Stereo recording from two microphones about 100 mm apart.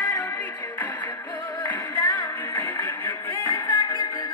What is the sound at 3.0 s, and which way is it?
Music, 50° left (ahead or behind).